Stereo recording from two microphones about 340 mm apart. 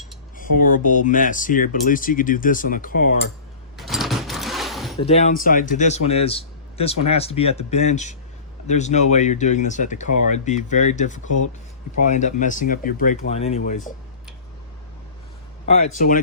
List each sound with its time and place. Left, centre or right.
0.3 s a sound: left
1.0 s speech: left
3.8 s mechanisms: centre
5.0 s a man's voice: centre
15.6 s speech: centre